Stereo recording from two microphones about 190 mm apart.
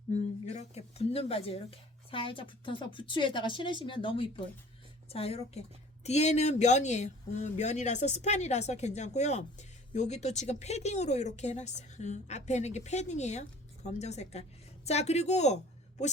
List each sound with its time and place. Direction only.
0.1 s a woman's voice: 35° left (ahead or behind)